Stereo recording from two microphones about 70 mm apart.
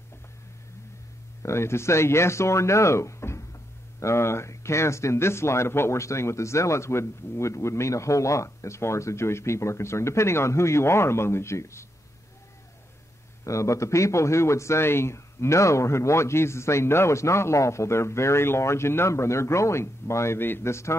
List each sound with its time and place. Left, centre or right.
1.4 s a man's voice: left
13.4 s a man's voice: left